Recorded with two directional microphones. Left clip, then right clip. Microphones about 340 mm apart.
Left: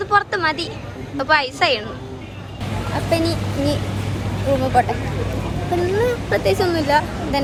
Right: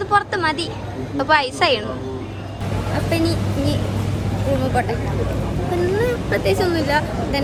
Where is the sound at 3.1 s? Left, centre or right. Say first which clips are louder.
Left 2 dB; centre.